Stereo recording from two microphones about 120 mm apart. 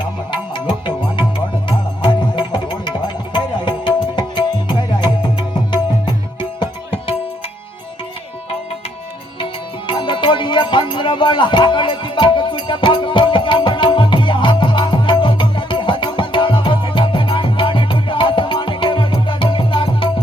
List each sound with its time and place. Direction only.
0.3 s music: 40° left (ahead or behind)
6.6 s music: 55° left (ahead or behind)
9.4 s music: 45° left (ahead or behind)